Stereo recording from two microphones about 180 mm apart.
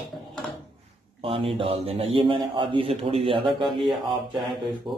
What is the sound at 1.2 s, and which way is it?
A man's voice, 30° right (ahead or behind).